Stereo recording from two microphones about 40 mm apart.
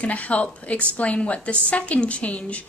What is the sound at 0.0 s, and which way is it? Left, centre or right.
A woman's voice, left.